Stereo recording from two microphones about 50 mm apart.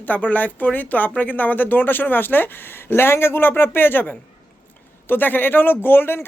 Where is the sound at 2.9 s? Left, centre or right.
Left.